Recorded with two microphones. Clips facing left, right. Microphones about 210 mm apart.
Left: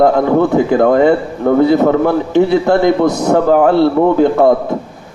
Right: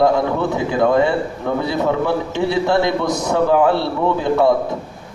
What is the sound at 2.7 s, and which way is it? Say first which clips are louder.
Speech: left 6 dB; 55° left (ahead or behind).